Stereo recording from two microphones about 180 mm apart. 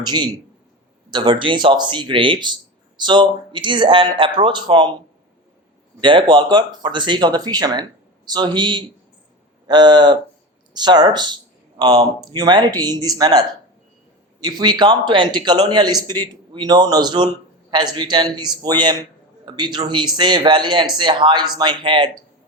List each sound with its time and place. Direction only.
1.1 s speech: 25° right (ahead or behind)
6.0 s speech: 25° right (ahead or behind)
14.4 s speech: 25° right (ahead or behind)